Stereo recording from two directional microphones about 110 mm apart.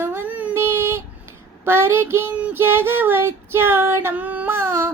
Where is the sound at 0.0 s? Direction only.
20° right (ahead or behind).